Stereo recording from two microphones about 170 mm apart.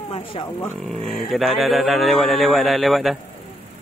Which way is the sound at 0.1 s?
30° left (ahead or behind).